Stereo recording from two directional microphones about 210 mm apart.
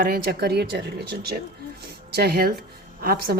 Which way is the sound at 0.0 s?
45° right (ahead or behind).